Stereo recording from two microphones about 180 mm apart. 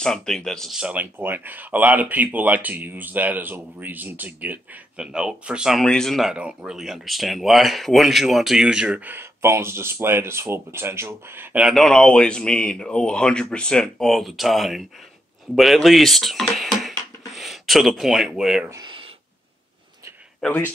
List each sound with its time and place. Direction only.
0.0 s speech: 5° left (ahead or behind)
18.7 s a sound: 25° right (ahead or behind)
20.3 s speech: 5° left (ahead or behind)